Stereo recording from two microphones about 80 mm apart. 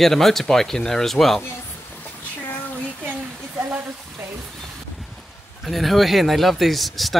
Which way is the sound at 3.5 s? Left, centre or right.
Right.